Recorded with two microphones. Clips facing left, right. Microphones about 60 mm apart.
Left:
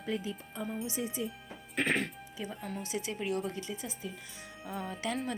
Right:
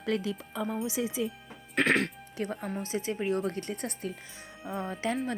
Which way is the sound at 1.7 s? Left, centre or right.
Right.